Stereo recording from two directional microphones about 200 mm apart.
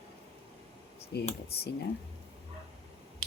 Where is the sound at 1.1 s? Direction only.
55° left (ahead or behind).